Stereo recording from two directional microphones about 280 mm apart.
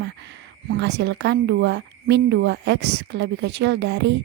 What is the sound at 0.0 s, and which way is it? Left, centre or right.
A woman's voice, right.